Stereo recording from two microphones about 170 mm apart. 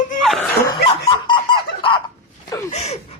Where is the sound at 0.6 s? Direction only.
25° left (ahead or behind).